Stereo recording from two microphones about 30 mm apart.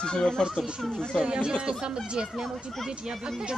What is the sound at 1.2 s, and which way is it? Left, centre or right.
Speech, right.